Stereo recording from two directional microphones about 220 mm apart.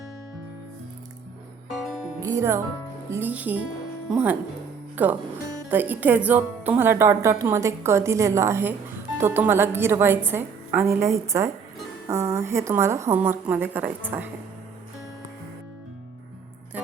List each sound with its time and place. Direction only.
1.7 s music: centre (ahead or behind)
2.2 s speech: 15° right (ahead or behind)